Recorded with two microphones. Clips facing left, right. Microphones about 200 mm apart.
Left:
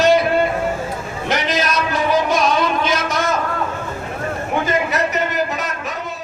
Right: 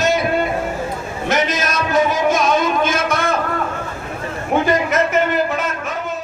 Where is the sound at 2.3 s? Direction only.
50° right (ahead or behind).